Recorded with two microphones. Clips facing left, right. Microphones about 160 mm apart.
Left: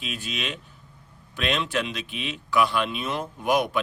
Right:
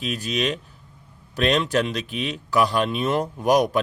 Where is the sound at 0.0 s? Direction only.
40° right (ahead or behind).